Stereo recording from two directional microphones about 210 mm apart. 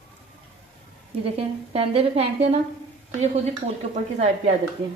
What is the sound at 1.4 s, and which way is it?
A woman's voice, 30° right (ahead or behind).